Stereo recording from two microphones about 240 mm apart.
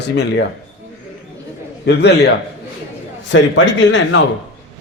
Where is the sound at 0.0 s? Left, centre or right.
Left.